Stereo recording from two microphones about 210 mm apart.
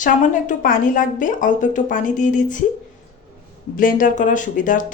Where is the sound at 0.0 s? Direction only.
40° left (ahead or behind).